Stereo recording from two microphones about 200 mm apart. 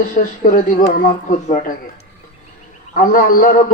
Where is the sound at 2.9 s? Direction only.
45° left (ahead or behind).